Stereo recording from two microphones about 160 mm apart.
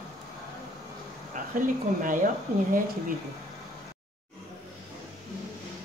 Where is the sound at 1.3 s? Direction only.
55° right (ahead or behind).